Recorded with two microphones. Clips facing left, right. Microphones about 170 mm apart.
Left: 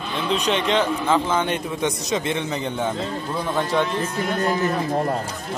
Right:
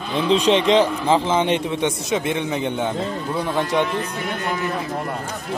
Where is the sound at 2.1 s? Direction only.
10° right (ahead or behind).